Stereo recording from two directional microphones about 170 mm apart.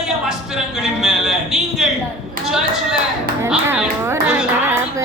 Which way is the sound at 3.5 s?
10° right (ahead or behind).